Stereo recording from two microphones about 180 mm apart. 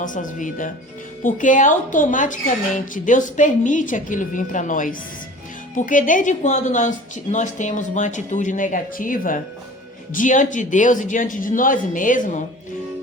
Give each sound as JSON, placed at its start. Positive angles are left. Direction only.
{"t": 0.0, "sound": "speech", "side_deg": 45}